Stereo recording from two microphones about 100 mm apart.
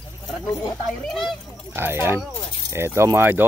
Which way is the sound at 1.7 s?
20° right (ahead or behind).